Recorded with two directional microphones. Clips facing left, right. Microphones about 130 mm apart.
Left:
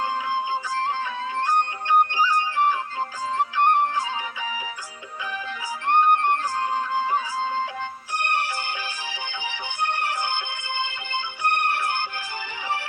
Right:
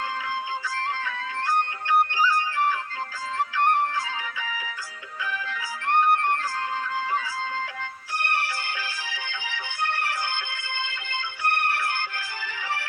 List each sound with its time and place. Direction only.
0.0 s music: 20° left (ahead or behind)